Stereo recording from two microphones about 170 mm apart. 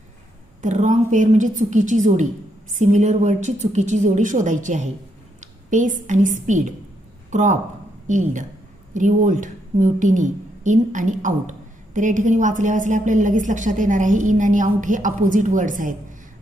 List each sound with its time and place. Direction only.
0.6 s a woman's voice: 45° right (ahead or behind)